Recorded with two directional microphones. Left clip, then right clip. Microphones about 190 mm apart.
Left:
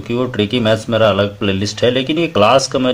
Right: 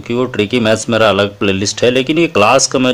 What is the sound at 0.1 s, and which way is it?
Speech, 25° right (ahead or behind).